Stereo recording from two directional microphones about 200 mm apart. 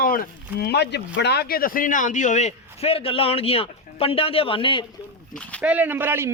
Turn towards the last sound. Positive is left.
turn(degrees=-10)  # may be behind; listen again after turning